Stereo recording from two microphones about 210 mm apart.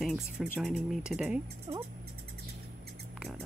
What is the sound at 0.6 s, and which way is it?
Speech, centre (ahead or behind).